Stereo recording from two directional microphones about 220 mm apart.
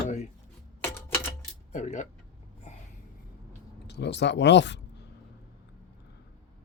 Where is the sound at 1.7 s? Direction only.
35° left (ahead or behind).